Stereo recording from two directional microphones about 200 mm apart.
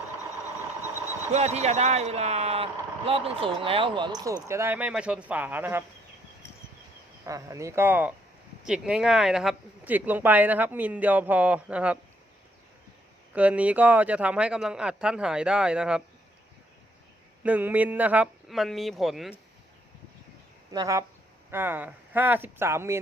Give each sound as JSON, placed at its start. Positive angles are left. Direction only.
{"t": 1.3, "sound": "speech", "side_deg": -35}
{"t": 7.3, "sound": "speech", "side_deg": -15}
{"t": 13.3, "sound": "a man's voice", "side_deg": -5}
{"t": 17.4, "sound": "a man's voice", "side_deg": -10}
{"t": 20.7, "sound": "speech", "side_deg": -15}